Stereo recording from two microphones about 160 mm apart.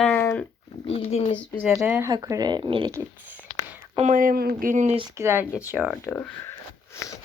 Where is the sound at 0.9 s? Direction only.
40° left (ahead or behind).